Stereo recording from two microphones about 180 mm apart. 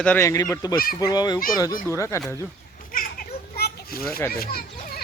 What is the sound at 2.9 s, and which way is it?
Children playing, 50° left (ahead or behind).